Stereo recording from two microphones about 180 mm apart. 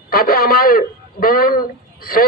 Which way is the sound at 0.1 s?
55° left (ahead or behind).